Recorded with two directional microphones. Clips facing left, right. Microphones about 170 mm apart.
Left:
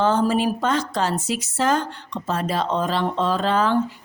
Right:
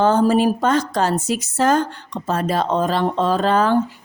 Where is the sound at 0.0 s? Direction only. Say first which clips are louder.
Right 4 dB; 45° right (ahead or behind).